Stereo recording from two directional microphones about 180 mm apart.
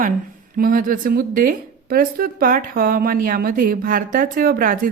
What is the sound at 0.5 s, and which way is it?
A woman's voice, 50° right (ahead or behind).